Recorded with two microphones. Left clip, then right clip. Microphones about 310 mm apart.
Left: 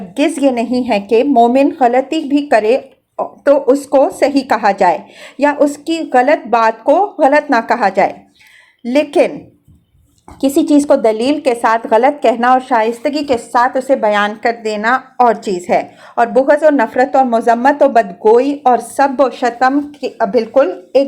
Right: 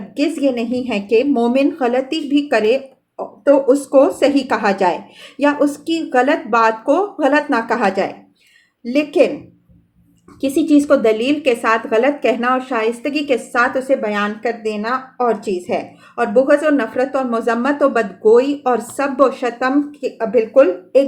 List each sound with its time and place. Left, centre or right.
0.2 s a woman's voice: centre
10.4 s a woman's voice: centre